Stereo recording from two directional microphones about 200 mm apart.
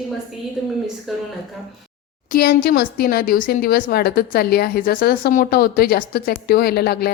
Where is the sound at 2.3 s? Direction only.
45° left (ahead or behind).